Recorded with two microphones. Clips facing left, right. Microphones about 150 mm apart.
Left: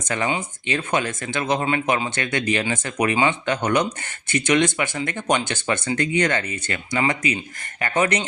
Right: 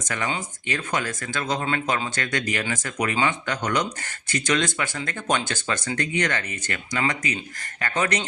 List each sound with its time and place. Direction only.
0.0 s speech: 30° left (ahead or behind)